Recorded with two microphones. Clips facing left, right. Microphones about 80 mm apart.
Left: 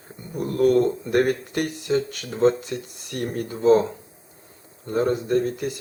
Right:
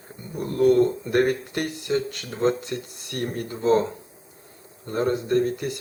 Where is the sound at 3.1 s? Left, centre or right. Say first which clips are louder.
Left 1 dB; centre.